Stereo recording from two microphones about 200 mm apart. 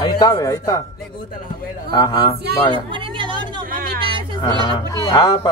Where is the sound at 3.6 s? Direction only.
45° right (ahead or behind).